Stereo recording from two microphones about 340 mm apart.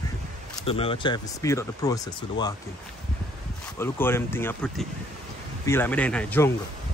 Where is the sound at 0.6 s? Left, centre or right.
Centre.